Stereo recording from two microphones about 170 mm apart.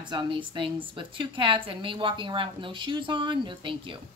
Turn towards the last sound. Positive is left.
turn(degrees=-30)  # may be behind; listen again after turning